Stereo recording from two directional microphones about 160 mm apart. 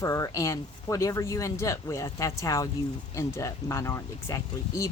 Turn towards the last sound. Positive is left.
turn(degrees=20)  # may be behind; listen again after turning